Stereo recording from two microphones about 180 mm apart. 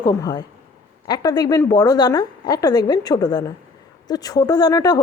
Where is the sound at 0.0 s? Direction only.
20° left (ahead or behind).